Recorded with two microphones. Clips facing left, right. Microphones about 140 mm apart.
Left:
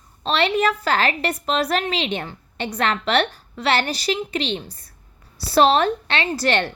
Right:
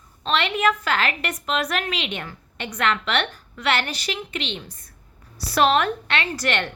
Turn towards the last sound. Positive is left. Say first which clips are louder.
# left 4 dB
turn(degrees=35)  # may be behind; listen again after turning